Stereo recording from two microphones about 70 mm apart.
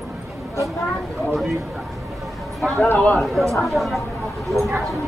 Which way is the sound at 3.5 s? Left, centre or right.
Centre.